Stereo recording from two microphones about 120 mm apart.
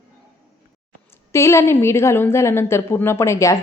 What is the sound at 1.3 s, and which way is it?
A woman's voice, 25° left (ahead or behind).